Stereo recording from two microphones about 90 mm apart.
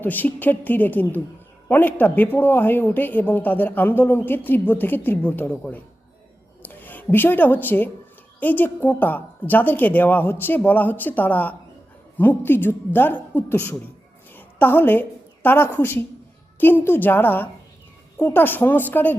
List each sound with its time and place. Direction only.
0.0 s speech: 20° left (ahead or behind)
14.3 s a sound: 20° left (ahead or behind)
15.4 s speech: 25° left (ahead or behind)